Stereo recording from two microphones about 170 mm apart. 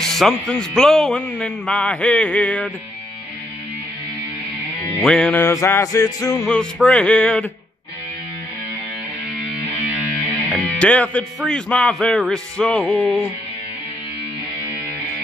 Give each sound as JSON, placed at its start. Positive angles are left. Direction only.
{"t": 0.0, "sound": "speech", "side_deg": 0}
{"t": 5.0, "sound": "music", "side_deg": 5}
{"t": 6.4, "sound": "music", "side_deg": 5}
{"t": 10.5, "sound": "speech", "side_deg": 5}